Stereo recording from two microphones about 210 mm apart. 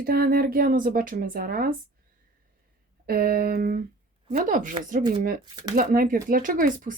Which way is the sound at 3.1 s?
45° right (ahead or behind).